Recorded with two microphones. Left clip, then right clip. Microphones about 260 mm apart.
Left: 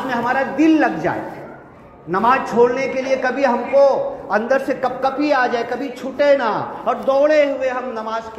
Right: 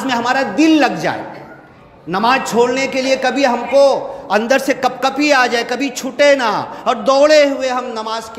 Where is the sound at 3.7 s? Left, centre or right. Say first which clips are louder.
Right 2 dB; right.